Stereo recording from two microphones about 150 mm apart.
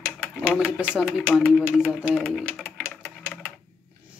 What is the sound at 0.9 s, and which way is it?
Speech, 5° right (ahead or behind).